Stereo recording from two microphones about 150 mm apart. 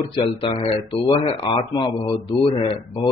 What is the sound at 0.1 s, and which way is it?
Speech, 35° left (ahead or behind).